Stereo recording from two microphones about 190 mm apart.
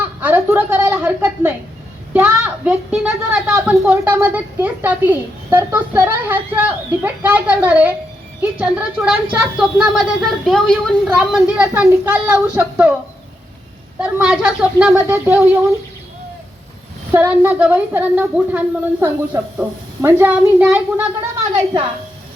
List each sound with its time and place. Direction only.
0.2 s a woman's voice: 10° right (ahead or behind)
14.0 s speech: 5° right (ahead or behind)
17.1 s a woman's voice: 10° right (ahead or behind)
21.5 s a woman's voice: 25° right (ahead or behind)